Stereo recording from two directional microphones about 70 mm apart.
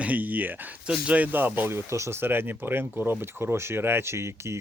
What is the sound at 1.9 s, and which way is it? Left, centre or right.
Speech, right.